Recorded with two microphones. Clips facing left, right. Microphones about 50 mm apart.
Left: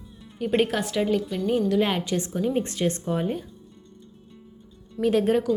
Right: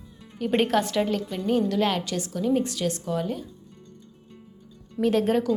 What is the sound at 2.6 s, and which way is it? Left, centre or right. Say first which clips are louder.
Speech: left 2 dB; left.